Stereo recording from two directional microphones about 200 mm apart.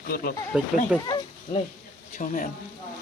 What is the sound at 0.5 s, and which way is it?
Speech, 5° right (ahead or behind).